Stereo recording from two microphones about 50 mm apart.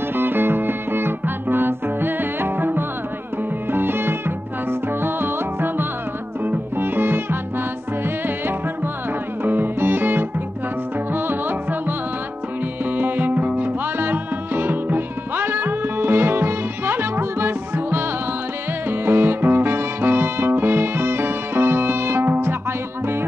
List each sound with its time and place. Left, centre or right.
0.1 s music: right
9.4 s music: right
12.9 s music: right
13.9 s music: right